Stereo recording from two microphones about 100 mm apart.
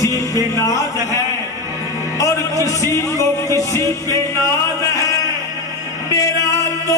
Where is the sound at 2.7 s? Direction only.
30° left (ahead or behind).